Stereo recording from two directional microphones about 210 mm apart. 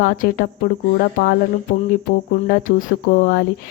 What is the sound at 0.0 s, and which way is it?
Speech, 40° left (ahead or behind).